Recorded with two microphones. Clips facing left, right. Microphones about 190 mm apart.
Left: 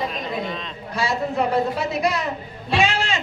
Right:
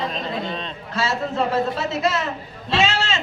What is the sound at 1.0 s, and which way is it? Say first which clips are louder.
A man's voice: even; 15° left (ahead or behind).